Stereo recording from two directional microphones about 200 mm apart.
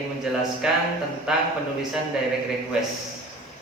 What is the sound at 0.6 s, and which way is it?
Speech, centre (ahead or behind).